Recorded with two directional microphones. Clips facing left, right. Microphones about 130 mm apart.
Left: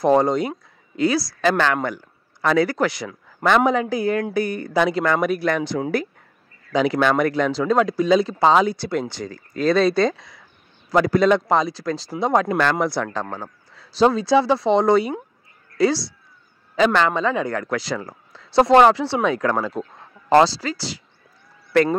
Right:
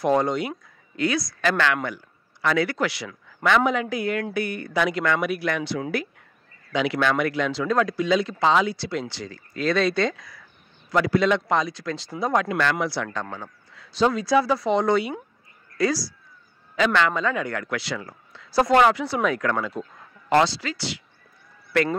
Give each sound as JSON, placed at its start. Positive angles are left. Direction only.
{"t": 0.0, "sound": "speech", "side_deg": 35}
{"t": 7.6, "sound": "speech", "side_deg": 30}
{"t": 12.2, "sound": "speech", "side_deg": 25}
{"t": 12.4, "sound": "speech", "side_deg": 45}
{"t": 13.1, "sound": "speech", "side_deg": 35}
{"t": 18.5, "sound": "speech", "side_deg": 30}